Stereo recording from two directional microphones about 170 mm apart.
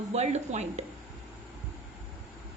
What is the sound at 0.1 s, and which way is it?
Speech, 40° right (ahead or behind).